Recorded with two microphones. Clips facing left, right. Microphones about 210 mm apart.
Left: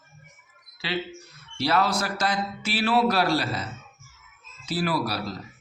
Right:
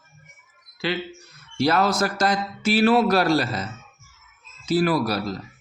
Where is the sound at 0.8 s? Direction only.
50° right (ahead or behind).